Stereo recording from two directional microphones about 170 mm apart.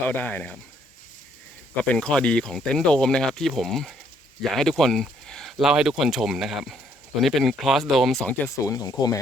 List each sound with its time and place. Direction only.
0.1 s speech: 10° left (ahead or behind)
1.7 s speech: 5° left (ahead or behind)
8.5 s speech: 20° left (ahead or behind)